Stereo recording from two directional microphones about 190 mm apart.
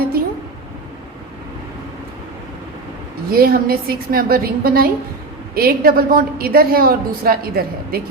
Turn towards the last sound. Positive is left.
turn(degrees=-50)  # may be behind; listen again after turning